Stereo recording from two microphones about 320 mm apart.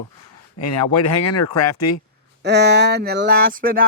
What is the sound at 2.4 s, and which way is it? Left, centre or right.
Speech, right.